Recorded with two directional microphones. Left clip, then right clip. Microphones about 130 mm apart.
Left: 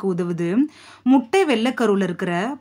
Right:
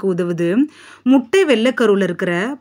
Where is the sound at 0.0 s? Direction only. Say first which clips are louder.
Right 5 dB; 20° right (ahead or behind).